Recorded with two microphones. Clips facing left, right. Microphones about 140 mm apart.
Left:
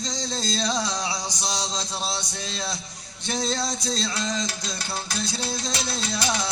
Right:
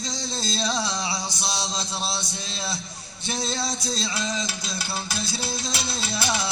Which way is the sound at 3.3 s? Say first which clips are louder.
Left 2 dB; 5° right (ahead or behind).